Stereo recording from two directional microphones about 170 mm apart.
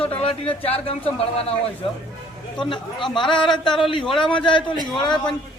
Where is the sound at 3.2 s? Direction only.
30° left (ahead or behind).